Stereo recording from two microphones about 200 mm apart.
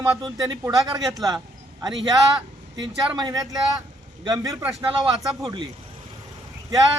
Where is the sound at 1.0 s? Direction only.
Centre (ahead or behind).